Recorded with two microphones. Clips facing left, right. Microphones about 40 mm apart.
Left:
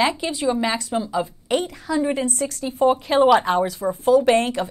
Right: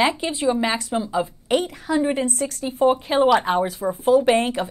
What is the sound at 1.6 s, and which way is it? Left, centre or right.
Speech, right.